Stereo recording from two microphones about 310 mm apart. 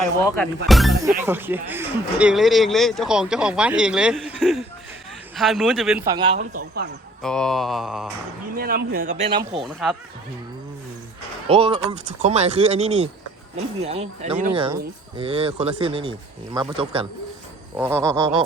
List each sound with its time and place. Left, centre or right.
0.3 s speech: centre
7.2 s speech: centre
8.5 s speech: right
11.4 s speech: centre